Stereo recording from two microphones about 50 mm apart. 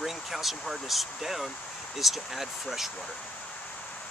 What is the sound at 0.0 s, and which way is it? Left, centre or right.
Speech, centre.